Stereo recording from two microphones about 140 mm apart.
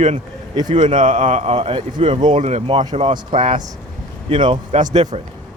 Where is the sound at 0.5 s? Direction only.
30° right (ahead or behind).